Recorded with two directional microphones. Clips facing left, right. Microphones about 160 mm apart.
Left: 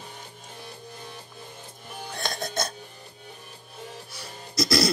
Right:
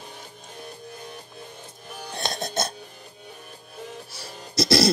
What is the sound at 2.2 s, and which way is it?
Music, 25° right (ahead or behind).